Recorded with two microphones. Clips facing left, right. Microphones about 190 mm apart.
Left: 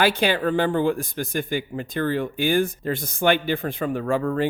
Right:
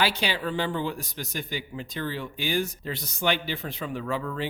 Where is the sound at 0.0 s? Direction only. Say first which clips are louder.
Left 7 dB; 50° left (ahead or behind).